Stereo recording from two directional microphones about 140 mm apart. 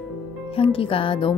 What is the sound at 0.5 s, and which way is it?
Speech, 40° left (ahead or behind).